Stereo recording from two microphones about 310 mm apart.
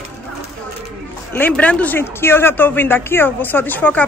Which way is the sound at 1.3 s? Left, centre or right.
Centre.